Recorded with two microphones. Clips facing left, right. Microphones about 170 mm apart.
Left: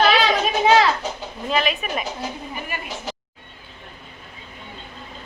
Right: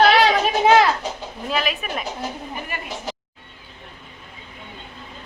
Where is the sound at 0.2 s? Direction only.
50° right (ahead or behind).